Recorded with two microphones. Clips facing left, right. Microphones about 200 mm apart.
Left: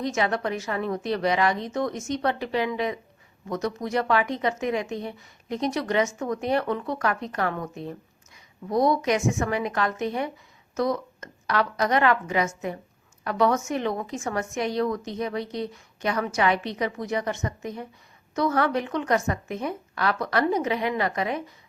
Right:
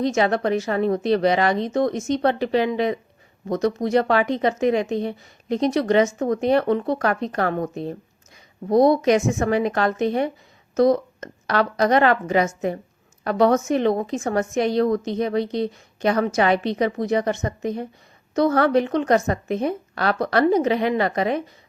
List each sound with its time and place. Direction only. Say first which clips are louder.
0.0 s a woman's voice: right 6 dB; 35° right (ahead or behind)
6.4 s a woman's voice: right 6 dB; 30° right (ahead or behind)